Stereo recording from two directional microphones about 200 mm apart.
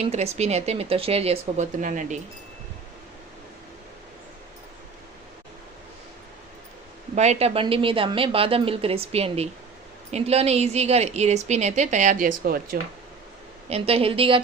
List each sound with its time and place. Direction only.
0.0 s a woman's voice: 35° right (ahead or behind)
7.2 s a woman's voice: 30° right (ahead or behind)
13.7 s a woman's voice: 30° right (ahead or behind)